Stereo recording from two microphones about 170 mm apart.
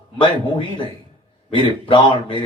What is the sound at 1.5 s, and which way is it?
Speech, 30° left (ahead or behind).